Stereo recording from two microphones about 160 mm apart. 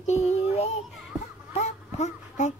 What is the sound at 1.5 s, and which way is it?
Baby cry, 45° left (ahead or behind).